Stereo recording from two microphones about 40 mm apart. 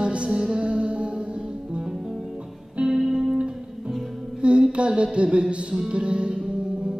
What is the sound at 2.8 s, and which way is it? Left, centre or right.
Music, centre.